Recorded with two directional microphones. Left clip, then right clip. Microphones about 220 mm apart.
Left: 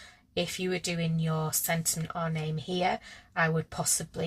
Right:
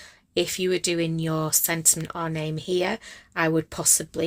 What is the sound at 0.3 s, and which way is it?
Speech, 45° right (ahead or behind).